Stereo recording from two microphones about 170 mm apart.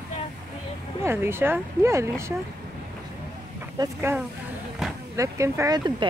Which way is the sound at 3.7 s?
20° right (ahead or behind).